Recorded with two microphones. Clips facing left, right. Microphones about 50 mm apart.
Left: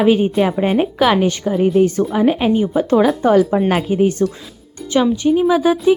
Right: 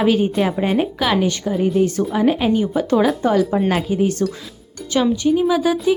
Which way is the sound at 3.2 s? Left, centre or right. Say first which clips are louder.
Left 4 dB; left.